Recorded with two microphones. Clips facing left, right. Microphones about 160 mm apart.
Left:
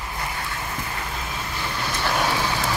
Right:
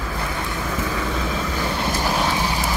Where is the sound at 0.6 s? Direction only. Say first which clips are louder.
Right 7 dB; 90° right.